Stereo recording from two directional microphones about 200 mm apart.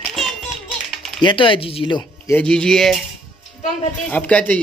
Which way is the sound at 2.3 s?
5° left (ahead or behind).